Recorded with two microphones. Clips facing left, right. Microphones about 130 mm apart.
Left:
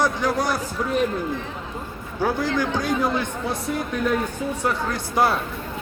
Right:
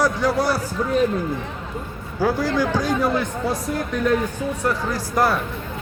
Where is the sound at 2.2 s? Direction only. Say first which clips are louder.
Right 2 dB; 5° right (ahead or behind).